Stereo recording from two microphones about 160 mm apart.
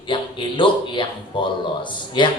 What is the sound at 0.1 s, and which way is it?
Speech, 30° left (ahead or behind).